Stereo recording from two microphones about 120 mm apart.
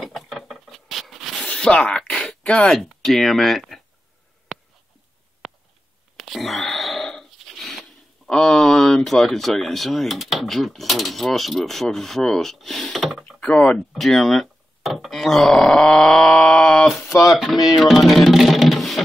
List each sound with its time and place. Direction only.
0.0 s a sound: centre (ahead or behind)
8.3 s speech: 5° left (ahead or behind)
17.1 s speech: 25° left (ahead or behind)
17.7 s music: centre (ahead or behind)